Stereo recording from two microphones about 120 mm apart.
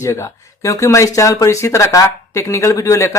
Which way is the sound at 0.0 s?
25° left (ahead or behind).